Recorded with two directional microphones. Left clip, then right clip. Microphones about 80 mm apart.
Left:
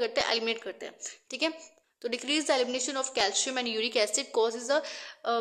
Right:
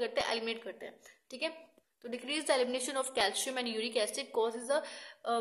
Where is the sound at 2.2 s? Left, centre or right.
Left.